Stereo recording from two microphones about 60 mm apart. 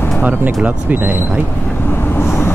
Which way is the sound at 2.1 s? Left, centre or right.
Left.